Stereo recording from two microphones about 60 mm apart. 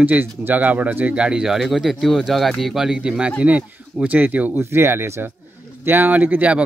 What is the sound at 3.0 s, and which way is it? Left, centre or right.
Speech, right.